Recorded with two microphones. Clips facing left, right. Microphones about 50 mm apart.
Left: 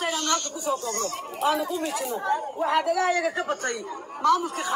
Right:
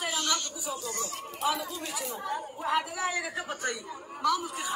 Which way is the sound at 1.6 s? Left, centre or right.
Centre.